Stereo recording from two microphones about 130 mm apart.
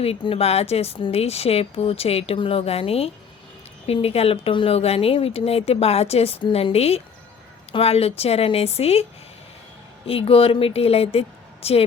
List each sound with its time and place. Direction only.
0.0 s speech: 50° left (ahead or behind)
10.1 s speech: 45° left (ahead or behind)